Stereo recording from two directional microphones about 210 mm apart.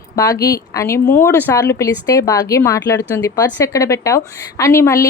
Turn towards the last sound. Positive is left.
turn(degrees=15)  # may be behind; listen again after turning